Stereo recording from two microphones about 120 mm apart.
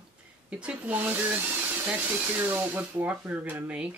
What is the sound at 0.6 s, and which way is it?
Speech, 10° right (ahead or behind).